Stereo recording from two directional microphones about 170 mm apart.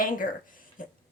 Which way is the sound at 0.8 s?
55° left (ahead or behind).